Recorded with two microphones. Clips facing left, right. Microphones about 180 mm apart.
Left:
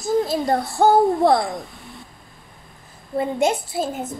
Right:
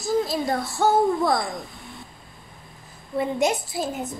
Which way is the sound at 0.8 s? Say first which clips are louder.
Left 5 dB; 40° left (ahead or behind).